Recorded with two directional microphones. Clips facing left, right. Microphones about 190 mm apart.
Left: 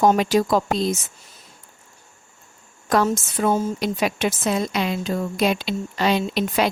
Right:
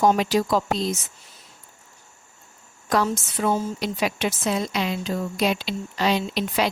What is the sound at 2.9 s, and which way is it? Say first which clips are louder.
A woman's voice: left 3 dB; 50° left (ahead or behind).